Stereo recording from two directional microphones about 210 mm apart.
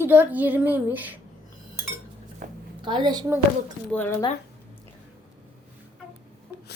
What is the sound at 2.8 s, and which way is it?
Speech, 20° right (ahead or behind).